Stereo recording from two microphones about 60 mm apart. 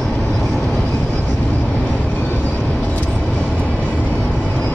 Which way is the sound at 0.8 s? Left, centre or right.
Left.